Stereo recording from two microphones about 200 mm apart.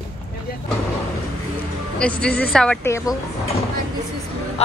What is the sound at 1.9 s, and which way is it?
A woman's voice, 5° left (ahead or behind).